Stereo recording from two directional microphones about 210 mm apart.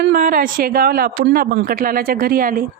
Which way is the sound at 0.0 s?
45° right (ahead or behind).